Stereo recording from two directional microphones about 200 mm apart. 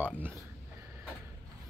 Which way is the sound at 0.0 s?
10° right (ahead or behind).